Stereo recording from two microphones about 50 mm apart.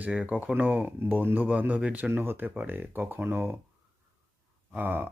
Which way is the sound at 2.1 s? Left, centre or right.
Right.